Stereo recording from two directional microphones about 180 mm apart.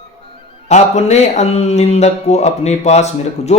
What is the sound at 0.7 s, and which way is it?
Speech, 40° left (ahead or behind).